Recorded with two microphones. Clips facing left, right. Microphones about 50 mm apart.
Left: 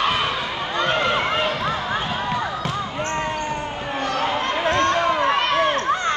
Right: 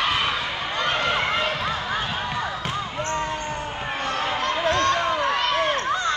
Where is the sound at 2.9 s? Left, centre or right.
Left.